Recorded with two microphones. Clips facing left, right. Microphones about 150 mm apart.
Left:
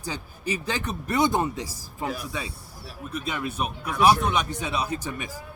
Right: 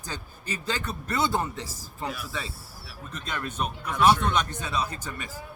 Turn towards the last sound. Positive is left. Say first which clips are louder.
# left 6 dB
turn(degrees=10)  # may be behind; listen again after turning